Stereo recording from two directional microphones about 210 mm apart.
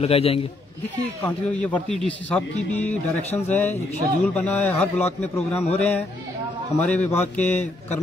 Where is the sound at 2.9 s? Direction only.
30° left (ahead or behind).